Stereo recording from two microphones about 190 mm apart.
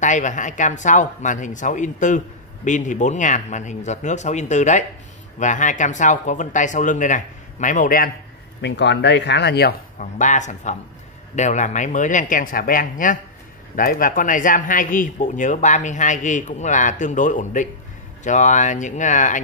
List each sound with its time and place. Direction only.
0.0 s speech: 40° left (ahead or behind)
8.5 s speech: 65° left (ahead or behind)
9.9 s speech: 40° left (ahead or behind)